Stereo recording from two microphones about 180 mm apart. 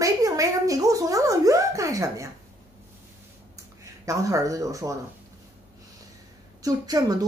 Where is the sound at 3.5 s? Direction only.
20° right (ahead or behind).